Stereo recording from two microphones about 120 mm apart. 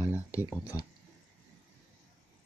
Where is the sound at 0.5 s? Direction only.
30° left (ahead or behind).